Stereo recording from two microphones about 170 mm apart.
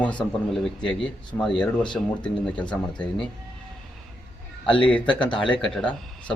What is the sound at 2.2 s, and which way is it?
Speech, 25° left (ahead or behind).